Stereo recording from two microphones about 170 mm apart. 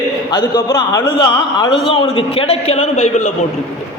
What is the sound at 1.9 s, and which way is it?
A man's voice, 35° left (ahead or behind).